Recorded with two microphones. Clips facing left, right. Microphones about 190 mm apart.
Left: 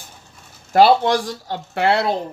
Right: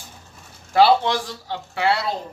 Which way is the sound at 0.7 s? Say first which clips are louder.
Left 3 dB; 45° left (ahead or behind).